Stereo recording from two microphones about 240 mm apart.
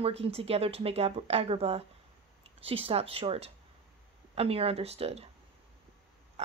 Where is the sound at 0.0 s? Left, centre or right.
Right.